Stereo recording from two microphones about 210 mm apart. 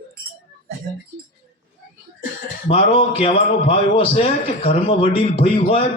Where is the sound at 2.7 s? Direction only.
25° left (ahead or behind).